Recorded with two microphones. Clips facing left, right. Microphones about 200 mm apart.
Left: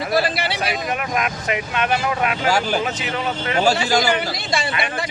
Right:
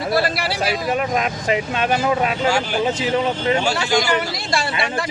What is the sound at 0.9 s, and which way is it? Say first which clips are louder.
Speech: right 3 dB; 30° right (ahead or behind).